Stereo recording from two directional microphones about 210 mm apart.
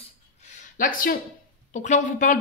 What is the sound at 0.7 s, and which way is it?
Speech, 40° left (ahead or behind).